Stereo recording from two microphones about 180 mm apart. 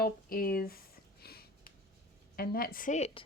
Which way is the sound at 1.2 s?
60° left (ahead or behind).